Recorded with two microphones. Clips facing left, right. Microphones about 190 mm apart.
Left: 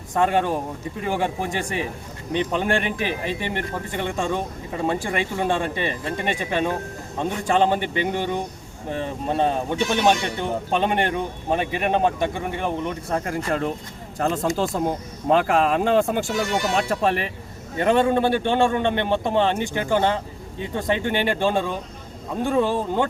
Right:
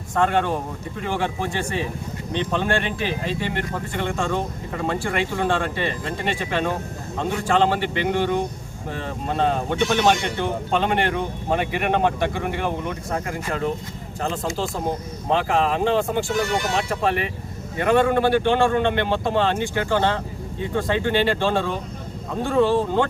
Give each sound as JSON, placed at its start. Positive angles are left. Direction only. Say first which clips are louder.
{"t": 0.1, "sound": "speech", "louder": "even", "side_deg": 15}
{"t": 13.1, "sound": "speech", "louder": "left 4 dB", "side_deg": 40}
{"t": 17.7, "sound": "speech", "louder": "even", "side_deg": 25}